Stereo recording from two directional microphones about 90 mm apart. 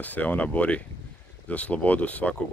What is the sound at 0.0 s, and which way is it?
Speech, 20° left (ahead or behind).